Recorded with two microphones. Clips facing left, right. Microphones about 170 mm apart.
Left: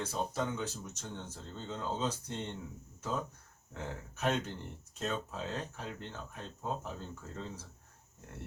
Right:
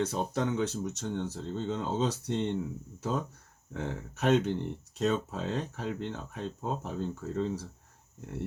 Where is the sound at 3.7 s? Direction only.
70° right (ahead or behind).